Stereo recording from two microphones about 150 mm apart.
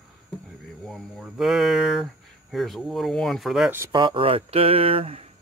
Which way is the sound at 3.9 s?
35° right (ahead or behind).